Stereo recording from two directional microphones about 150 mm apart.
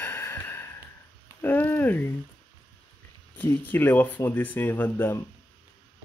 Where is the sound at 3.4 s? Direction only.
10° left (ahead or behind).